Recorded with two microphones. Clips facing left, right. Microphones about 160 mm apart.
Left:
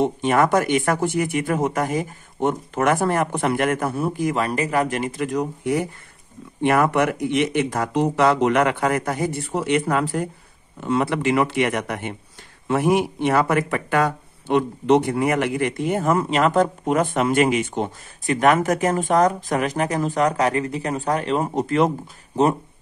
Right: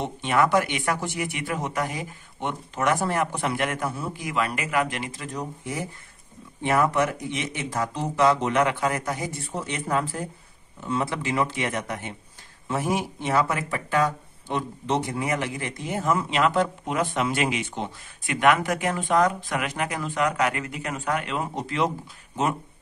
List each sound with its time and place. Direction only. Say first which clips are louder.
0.0 s speech: left 5 dB; 50° left (ahead or behind)